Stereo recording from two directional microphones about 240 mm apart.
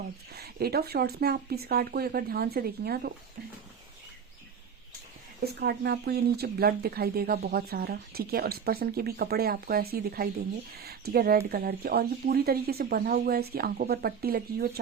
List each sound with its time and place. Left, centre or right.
0.3 s speech: right
5.5 s speech: right